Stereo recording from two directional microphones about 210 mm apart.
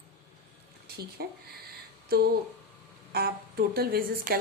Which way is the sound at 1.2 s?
45° right (ahead or behind).